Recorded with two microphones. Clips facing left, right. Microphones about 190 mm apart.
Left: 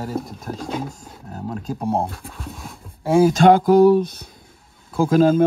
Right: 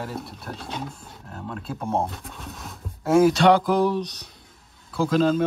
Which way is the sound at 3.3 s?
50° left (ahead or behind).